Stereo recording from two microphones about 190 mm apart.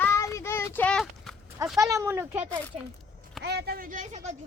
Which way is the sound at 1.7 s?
15° right (ahead or behind).